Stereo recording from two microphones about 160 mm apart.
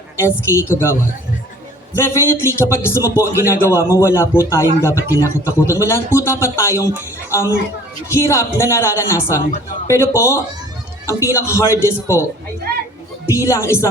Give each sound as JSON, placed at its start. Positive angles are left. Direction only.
{"t": 0.2, "sound": "a man's voice", "side_deg": 15}
{"t": 2.0, "sound": "a man's voice", "side_deg": 15}
{"t": 13.4, "sound": "a man's voice", "side_deg": 15}